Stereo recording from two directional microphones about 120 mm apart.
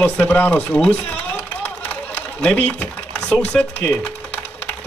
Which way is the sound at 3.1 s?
10° left (ahead or behind).